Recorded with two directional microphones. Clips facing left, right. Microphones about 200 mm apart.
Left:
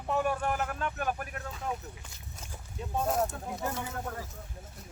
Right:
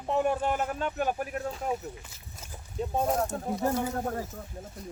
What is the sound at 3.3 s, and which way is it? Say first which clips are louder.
Speech: right 7 dB; 35° right (ahead or behind).